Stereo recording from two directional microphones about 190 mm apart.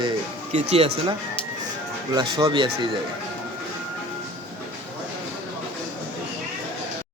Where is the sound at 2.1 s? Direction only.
25° right (ahead or behind).